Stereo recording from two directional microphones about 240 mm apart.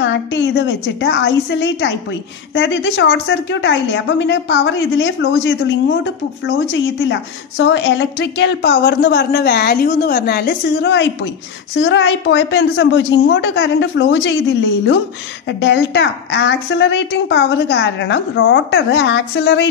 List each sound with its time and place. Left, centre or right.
0.0 s a woman's voice: left
15.4 s a woman's voice: left